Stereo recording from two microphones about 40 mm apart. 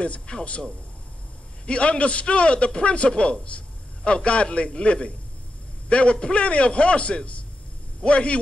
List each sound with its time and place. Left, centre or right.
0.3 s speech: left
1.7 s a man's voice: left